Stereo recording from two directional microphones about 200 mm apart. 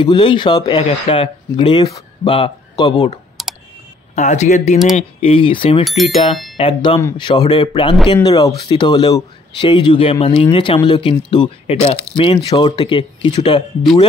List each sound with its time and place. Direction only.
0.0 s speech: 25° left (ahead or behind)
3.4 s clicking: centre (ahead or behind)
4.1 s speech: 35° left (ahead or behind)
5.9 s speech: centre (ahead or behind)
6.5 s speech: 25° left (ahead or behind)